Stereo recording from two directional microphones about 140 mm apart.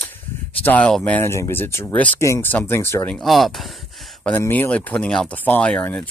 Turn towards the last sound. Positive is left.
turn(degrees=10)  # may be behind; listen again after turning